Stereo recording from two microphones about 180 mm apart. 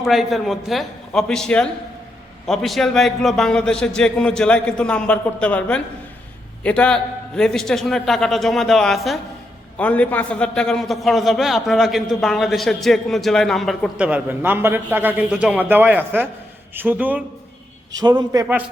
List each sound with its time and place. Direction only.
0.0 s a man's voice: centre (ahead or behind)
18.0 s a man's voice: 25° right (ahead or behind)